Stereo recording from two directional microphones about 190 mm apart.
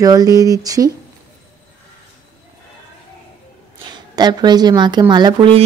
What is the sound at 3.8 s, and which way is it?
Speech, 20° right (ahead or behind).